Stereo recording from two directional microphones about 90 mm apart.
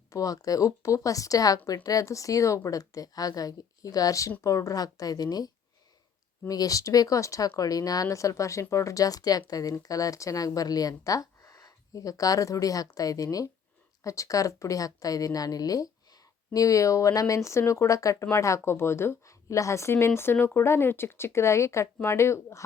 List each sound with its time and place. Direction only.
0.1 s speech: 40° left (ahead or behind)
6.5 s speech: 40° left (ahead or behind)